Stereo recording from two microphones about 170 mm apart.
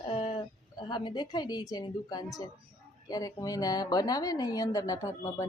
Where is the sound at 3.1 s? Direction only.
20° left (ahead or behind).